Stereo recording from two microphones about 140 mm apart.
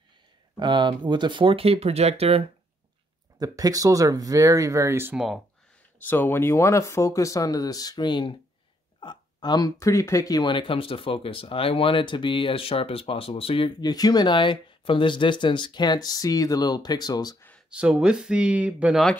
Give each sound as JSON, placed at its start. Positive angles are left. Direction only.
{"t": 0.6, "sound": "speech", "side_deg": -35}
{"t": 3.3, "sound": "speech", "side_deg": -25}
{"t": 5.1, "sound": "speech", "side_deg": 0}
{"t": 5.9, "sound": "speech", "side_deg": 15}
{"t": 17.6, "sound": "speech", "side_deg": -5}